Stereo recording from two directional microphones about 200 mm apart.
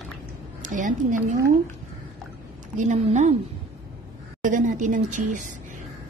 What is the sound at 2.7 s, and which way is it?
Speech, 35° right (ahead or behind).